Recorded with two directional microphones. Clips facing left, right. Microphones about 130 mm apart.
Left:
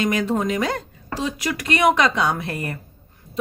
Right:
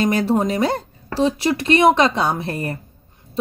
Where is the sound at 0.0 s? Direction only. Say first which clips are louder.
Right 3 dB; 35° right (ahead or behind).